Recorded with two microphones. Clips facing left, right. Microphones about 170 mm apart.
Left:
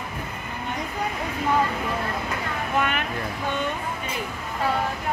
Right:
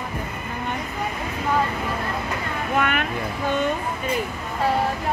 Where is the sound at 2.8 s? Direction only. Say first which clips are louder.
Right 2 dB; 60° right (ahead or behind).